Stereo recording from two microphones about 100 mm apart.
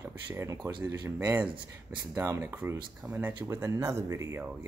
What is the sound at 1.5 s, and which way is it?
Speech, 50° right (ahead or behind).